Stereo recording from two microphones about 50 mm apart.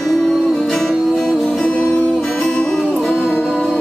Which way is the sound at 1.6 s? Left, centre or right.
Left.